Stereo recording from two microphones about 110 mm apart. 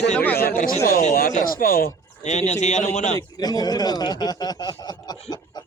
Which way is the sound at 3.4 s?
35° left (ahead or behind).